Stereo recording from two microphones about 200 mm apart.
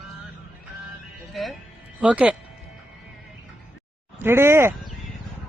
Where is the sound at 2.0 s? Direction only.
5° right (ahead or behind).